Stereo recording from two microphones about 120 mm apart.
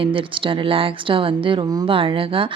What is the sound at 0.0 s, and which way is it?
Speech, 45° right (ahead or behind).